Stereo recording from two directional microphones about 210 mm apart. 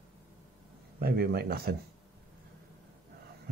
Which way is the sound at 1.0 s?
45° right (ahead or behind).